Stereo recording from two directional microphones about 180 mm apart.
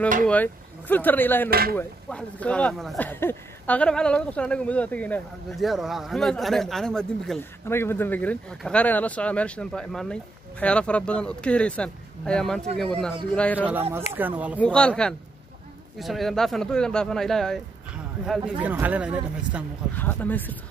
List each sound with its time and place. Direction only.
0.3 s speech: 10° left (ahead or behind)
1.5 s speech: 55° right (ahead or behind)
1.8 s speech: 5° left (ahead or behind)
13.6 s speech: 10° right (ahead or behind)
14.6 s speech: 5° left (ahead or behind)
19.9 s speech: 10° left (ahead or behind)